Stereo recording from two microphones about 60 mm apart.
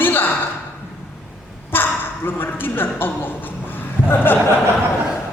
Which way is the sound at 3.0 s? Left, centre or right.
Left.